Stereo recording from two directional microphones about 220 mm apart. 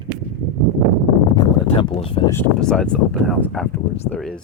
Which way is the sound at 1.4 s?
25° left (ahead or behind).